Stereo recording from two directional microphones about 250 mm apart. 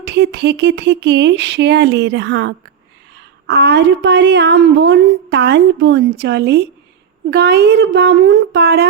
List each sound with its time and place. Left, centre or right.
0.0 s a woman's voice: right